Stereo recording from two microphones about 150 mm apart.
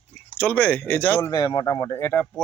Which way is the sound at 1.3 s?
25° left (ahead or behind).